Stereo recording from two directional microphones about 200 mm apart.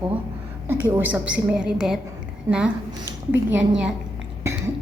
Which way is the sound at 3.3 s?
5° right (ahead or behind).